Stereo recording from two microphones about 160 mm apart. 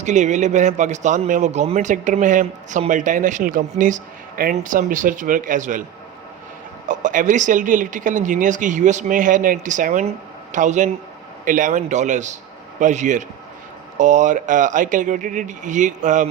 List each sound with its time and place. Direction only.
0.0 s speech: 50° right (ahead or behind)
6.8 s speech: 50° right (ahead or behind)